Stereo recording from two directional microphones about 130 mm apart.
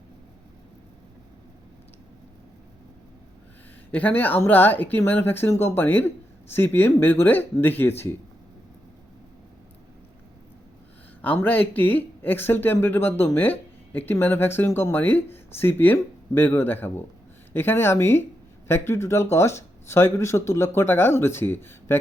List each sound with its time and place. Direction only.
3.9 s speech: 15° left (ahead or behind)
11.2 s speech: 15° left (ahead or behind)